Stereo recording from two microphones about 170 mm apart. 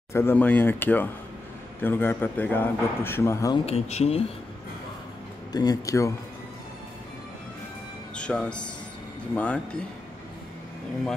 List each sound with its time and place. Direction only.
0.1 s a man's voice: 15° left (ahead or behind)
3.5 s speech: 35° left (ahead or behind)
5.5 s speech: 25° left (ahead or behind)
8.2 s a man's voice: 5° left (ahead or behind)